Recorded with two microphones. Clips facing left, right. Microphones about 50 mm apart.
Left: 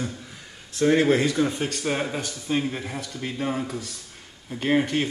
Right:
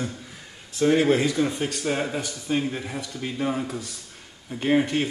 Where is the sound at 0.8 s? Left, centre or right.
Centre.